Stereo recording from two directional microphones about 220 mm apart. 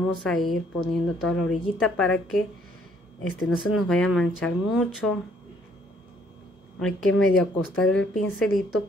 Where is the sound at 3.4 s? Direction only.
Centre (ahead or behind).